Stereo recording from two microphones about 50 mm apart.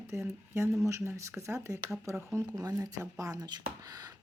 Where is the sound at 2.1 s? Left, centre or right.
Right.